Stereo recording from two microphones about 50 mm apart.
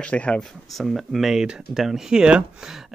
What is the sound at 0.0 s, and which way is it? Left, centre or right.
Speech, left.